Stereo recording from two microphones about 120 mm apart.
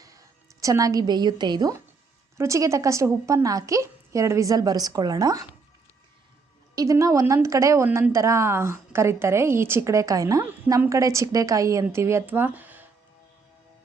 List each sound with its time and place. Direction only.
0.0 s a woman's voice: 30° right (ahead or behind)
2.4 s a woman's voice: 25° right (ahead or behind)
6.7 s a woman's voice: 25° right (ahead or behind)
7.9 s speech: 15° right (ahead or behind)
8.1 s a woman's voice: 25° right (ahead or behind)